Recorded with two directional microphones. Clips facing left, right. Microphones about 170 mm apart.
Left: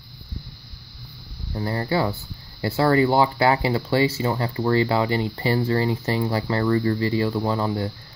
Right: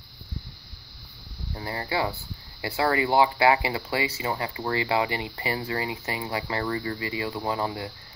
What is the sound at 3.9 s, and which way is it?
Speech, 30° left (ahead or behind).